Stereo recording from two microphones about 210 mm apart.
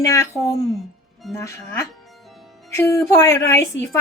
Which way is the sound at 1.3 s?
Centre (ahead or behind).